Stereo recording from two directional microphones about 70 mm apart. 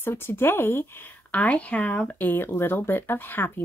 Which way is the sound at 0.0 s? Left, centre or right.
Left.